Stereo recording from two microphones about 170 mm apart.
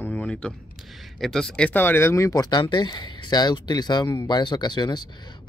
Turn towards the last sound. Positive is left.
turn(degrees=25)  # may be behind; listen again after turning